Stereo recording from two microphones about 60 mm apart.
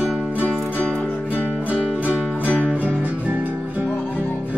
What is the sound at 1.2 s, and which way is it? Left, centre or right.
Music, right.